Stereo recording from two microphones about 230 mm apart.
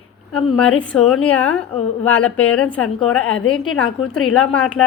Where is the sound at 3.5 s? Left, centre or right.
Centre.